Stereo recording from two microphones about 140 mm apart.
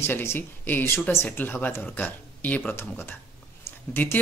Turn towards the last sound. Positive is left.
turn(degrees=15)  # may be behind; listen again after turning